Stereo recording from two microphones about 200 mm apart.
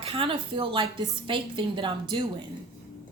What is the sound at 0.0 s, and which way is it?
A woman's voice, 25° right (ahead or behind).